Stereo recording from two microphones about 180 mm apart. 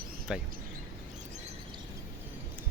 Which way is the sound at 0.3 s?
5° right (ahead or behind).